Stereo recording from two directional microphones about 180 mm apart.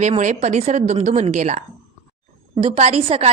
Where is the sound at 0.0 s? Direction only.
40° right (ahead or behind).